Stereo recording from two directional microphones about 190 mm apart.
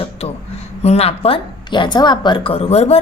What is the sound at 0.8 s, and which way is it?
A woman's voice, 35° left (ahead or behind).